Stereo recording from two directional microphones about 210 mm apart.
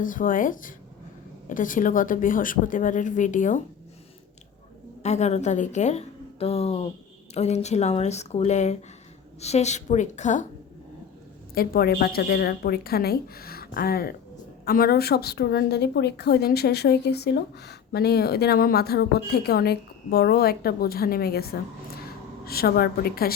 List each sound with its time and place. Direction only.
0.0 s speech: 40° left (ahead or behind)
5.0 s speech: 30° left (ahead or behind)
11.5 s a woman's voice: 45° left (ahead or behind)